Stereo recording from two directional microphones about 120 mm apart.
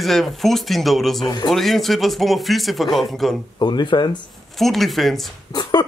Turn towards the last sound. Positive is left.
turn(degrees=35)  # may be behind; listen again after turning